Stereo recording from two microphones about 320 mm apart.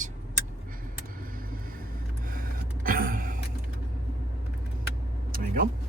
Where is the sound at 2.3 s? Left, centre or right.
Right.